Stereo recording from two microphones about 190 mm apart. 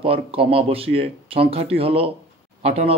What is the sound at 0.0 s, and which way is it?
A man's voice, 30° right (ahead or behind).